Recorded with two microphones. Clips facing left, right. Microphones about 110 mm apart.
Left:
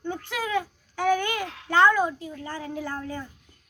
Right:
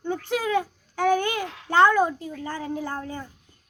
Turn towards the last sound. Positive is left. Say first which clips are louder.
# right 2 dB
turn(degrees=-30)  # may be behind; listen again after turning